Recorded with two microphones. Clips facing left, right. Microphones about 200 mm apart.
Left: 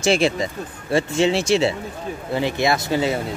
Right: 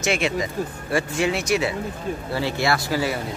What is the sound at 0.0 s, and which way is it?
Speech, 30° left (ahead or behind).